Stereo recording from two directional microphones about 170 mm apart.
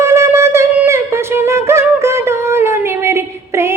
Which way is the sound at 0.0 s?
15° right (ahead or behind).